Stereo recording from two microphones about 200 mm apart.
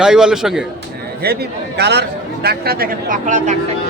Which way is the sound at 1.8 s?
55° right (ahead or behind).